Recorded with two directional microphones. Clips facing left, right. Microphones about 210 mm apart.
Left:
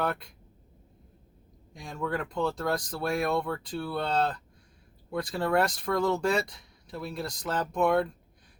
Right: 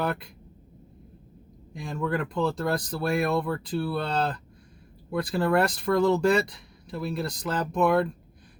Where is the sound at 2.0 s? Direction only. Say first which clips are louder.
Right 3 dB; centre (ahead or behind).